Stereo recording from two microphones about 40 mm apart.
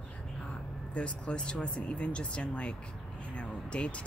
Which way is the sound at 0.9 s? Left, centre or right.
Left.